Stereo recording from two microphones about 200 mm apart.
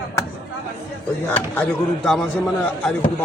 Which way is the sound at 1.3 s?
5° left (ahead or behind).